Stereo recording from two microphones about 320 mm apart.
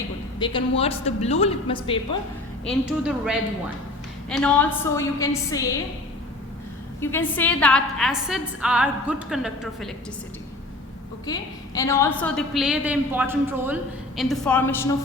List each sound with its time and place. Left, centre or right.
0.3 s a woman's voice: centre
2.6 s a woman's voice: centre
7.0 s a woman's voice: centre
11.3 s a woman's voice: centre